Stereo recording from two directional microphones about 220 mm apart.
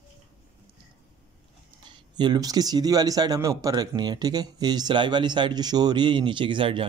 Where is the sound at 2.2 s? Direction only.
20° right (ahead or behind).